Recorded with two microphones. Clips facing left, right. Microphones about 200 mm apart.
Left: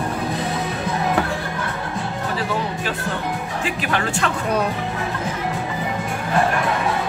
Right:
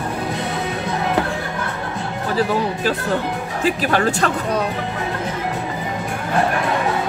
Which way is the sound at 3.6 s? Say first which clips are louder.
Right 7 dB; 40° right (ahead or behind).